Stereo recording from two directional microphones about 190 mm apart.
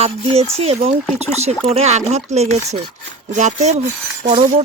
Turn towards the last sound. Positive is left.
turn(degrees=-30)  # may be behind; listen again after turning